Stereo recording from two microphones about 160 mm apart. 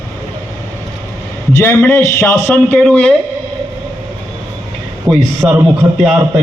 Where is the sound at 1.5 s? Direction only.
15° left (ahead or behind).